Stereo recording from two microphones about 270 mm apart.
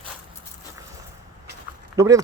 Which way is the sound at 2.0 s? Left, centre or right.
Centre.